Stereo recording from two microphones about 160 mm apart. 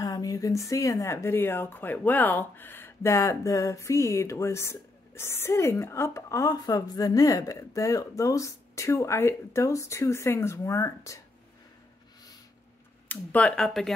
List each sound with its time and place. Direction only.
0.0 s speech: 20° left (ahead or behind)
13.1 s speech: 10° left (ahead or behind)